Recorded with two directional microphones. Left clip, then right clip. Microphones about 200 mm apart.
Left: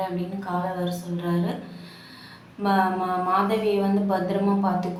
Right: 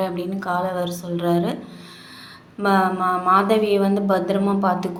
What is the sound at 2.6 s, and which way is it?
A woman's voice, 35° right (ahead or behind).